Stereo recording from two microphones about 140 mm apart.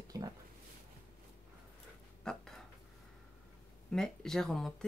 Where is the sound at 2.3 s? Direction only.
5° left (ahead or behind).